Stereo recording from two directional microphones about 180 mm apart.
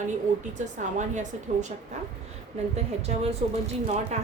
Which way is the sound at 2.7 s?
35° right (ahead or behind).